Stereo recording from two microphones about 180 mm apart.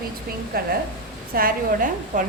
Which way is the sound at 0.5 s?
55° right (ahead or behind).